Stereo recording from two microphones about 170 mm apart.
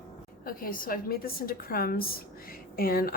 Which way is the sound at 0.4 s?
55° left (ahead or behind).